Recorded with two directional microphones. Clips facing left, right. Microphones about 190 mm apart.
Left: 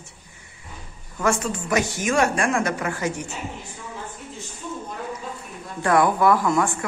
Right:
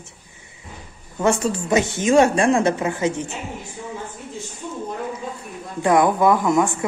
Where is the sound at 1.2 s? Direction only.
30° right (ahead or behind).